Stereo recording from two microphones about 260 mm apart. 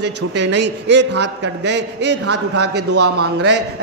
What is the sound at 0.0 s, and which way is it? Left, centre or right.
A man's voice, right.